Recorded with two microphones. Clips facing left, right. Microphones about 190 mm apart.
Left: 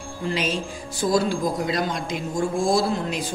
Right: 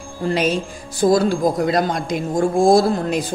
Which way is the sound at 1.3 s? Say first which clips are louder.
Right 6 dB; 50° right (ahead or behind).